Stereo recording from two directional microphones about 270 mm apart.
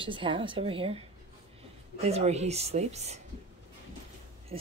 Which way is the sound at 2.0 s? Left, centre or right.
Right.